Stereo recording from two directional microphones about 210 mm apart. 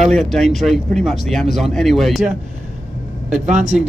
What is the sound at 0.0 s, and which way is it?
Speech, centre (ahead or behind).